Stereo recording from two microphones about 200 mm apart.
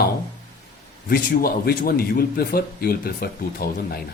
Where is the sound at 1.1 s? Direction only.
50° left (ahead or behind).